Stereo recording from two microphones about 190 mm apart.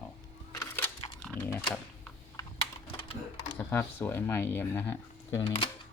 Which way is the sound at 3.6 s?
10° left (ahead or behind).